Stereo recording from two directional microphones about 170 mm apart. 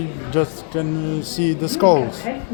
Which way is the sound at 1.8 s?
10° left (ahead or behind).